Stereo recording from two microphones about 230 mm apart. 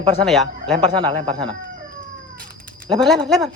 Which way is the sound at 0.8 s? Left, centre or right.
Right.